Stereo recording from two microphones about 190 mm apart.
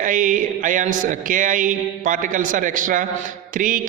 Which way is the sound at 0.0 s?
45° right (ahead or behind).